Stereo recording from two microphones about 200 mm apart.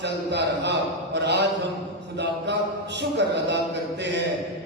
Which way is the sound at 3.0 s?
60° right (ahead or behind).